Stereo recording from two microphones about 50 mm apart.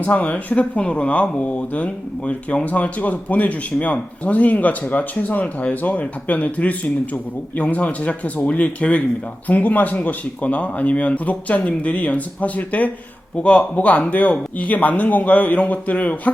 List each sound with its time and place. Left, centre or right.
0.0 s speech: left